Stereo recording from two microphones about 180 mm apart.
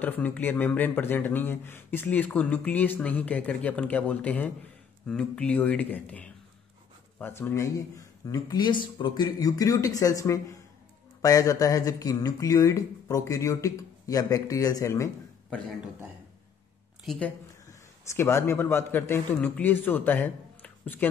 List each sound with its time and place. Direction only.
0.0 s speech: 10° left (ahead or behind)
17.0 s a woman's voice: centre (ahead or behind)
17.6 s a man's voice: 15° left (ahead or behind)